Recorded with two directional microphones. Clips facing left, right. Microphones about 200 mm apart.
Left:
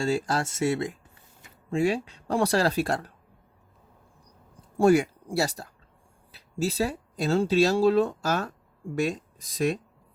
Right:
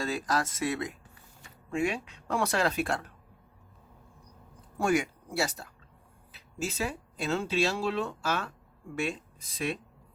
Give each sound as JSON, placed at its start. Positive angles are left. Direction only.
{"t": 0.0, "sound": "speech", "side_deg": 30}
{"t": 4.8, "sound": "speech", "side_deg": 35}